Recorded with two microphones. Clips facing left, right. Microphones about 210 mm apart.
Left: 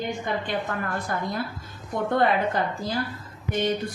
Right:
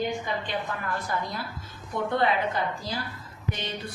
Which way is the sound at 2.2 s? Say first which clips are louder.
Left 3 dB; 50° left (ahead or behind).